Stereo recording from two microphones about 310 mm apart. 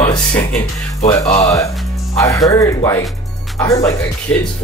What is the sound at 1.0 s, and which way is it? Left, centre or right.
Speech, left.